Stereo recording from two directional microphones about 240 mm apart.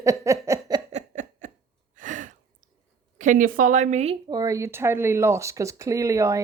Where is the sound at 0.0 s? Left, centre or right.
Centre.